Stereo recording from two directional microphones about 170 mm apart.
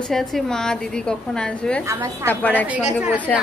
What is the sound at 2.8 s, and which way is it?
Speech, 10° right (ahead or behind).